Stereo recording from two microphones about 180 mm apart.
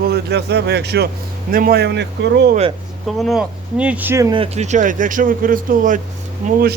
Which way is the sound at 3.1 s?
Centre (ahead or behind).